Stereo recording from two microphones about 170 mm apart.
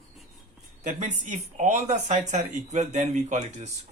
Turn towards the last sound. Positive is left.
turn(degrees=-45)  # may be behind; listen again after turning